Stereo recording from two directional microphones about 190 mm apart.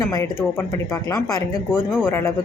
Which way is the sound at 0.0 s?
20° left (ahead or behind).